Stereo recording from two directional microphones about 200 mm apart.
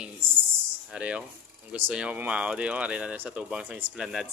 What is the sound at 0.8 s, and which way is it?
Speech, 5° right (ahead or behind).